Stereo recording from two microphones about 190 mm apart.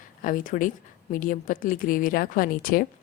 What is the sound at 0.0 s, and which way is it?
A woman's voice, 45° left (ahead or behind).